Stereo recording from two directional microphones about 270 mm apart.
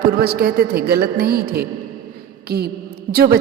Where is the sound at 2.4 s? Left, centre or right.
Right.